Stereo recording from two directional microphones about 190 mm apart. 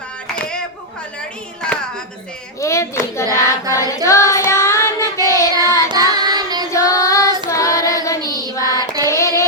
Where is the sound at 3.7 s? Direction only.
15° left (ahead or behind).